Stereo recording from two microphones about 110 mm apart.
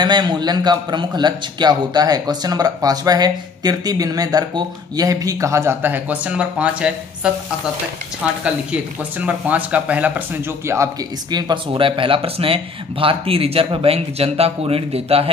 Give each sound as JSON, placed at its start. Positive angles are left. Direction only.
{"t": 0.0, "sound": "a man's voice", "side_deg": -40}
{"t": 9.2, "sound": "speech", "side_deg": -15}
{"t": 11.2, "sound": "speech", "side_deg": -40}